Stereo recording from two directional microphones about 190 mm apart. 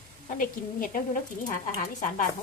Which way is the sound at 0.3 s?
45° left (ahead or behind).